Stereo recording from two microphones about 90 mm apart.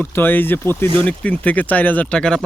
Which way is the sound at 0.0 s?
25° left (ahead or behind).